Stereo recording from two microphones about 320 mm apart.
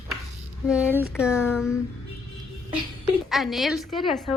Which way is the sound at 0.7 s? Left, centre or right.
Centre.